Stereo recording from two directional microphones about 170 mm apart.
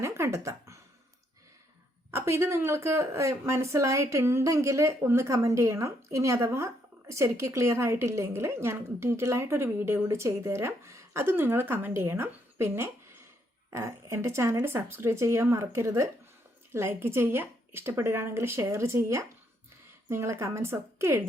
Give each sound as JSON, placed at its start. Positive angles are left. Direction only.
{"t": 0.0, "sound": "music", "side_deg": -15}
{"t": 2.0, "sound": "a woman's voice", "side_deg": -15}